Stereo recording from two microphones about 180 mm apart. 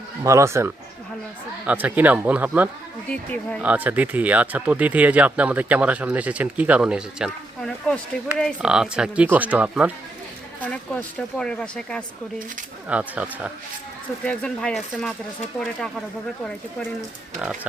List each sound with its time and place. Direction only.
0.2 s speech: 15° right (ahead or behind)
3.1 s speech: 5° left (ahead or behind)
3.6 s speech: 10° right (ahead or behind)
10.6 s a woman's voice: 10° left (ahead or behind)
12.9 s speech: 5° right (ahead or behind)
14.3 s a woman's voice: 5° left (ahead or behind)
17.4 s a woman's voice: 5° right (ahead or behind)